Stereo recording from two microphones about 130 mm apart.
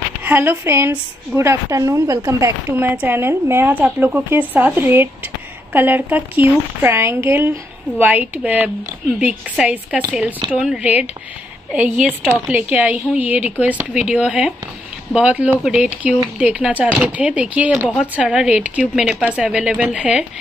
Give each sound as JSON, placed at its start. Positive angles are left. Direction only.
{"t": 0.2, "sound": "a woman's voice", "side_deg": -15}